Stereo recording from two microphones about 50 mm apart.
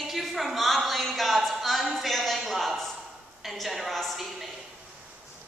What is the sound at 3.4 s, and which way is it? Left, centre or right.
A woman's voice, centre.